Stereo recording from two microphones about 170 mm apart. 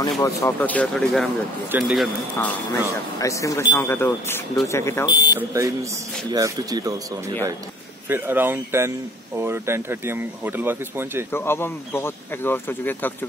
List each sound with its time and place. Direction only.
0.2 s speech: 15° left (ahead or behind); by 2.0 s 5° right (ahead or behind)
2.3 s speech: 15° left (ahead or behind)
5.3 s speech: 20° right (ahead or behind)
8.1 s speech: 10° right (ahead or behind)
11.3 s speech: 15° left (ahead or behind)